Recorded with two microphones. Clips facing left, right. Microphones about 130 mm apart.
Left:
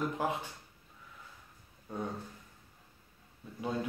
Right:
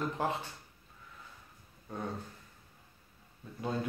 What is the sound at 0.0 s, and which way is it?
Speech, 10° left (ahead or behind).